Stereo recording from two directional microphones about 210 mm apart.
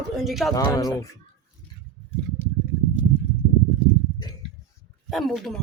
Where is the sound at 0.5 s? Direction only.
15° left (ahead or behind).